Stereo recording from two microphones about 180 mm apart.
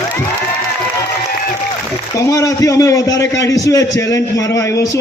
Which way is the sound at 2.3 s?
20° left (ahead or behind).